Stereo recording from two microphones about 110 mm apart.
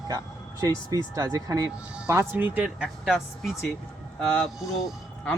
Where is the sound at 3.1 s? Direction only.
Centre (ahead or behind).